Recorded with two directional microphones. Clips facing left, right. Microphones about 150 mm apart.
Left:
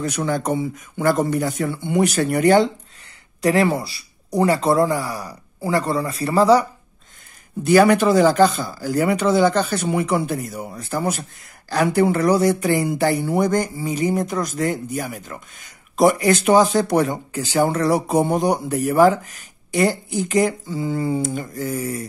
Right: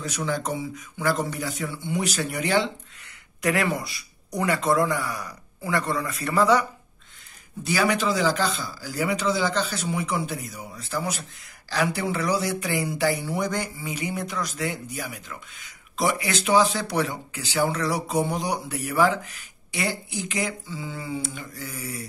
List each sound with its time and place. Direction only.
0.0 s speech: 55° left (ahead or behind)
3.3 s speech: 30° left (ahead or behind)
7.6 s speech: 55° left (ahead or behind)